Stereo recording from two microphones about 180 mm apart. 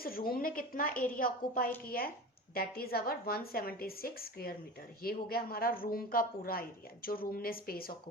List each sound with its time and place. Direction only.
0.0 s a woman's voice: 55° left (ahead or behind)